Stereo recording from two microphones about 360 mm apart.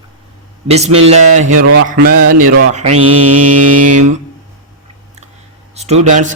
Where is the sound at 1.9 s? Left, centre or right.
Right.